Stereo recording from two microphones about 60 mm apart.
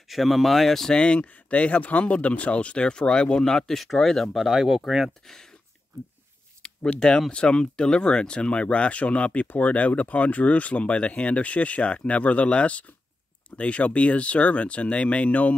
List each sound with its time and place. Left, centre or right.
0.1 s speech: centre
5.2 s speech: centre
6.6 s a sound: centre
7.0 s speech: centre